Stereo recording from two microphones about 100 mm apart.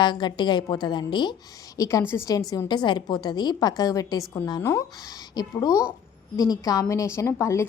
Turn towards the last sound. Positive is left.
turn(degrees=30)  # may be behind; listen again after turning